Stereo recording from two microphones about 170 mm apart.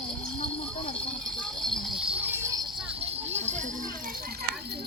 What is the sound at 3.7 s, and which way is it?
Speech, 55° right (ahead or behind).